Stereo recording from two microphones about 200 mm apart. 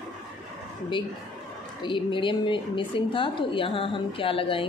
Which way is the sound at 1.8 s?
25° left (ahead or behind).